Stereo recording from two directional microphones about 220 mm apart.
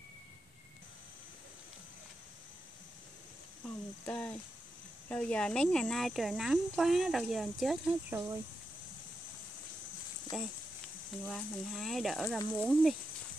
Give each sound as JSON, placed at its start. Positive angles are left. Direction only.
{"t": 4.0, "sound": "a sound", "side_deg": 5}
{"t": 5.1, "sound": "speech", "side_deg": 5}
{"t": 10.3, "sound": "speech", "side_deg": 0}